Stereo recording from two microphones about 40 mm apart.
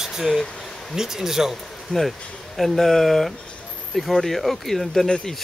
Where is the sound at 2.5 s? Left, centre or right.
Centre.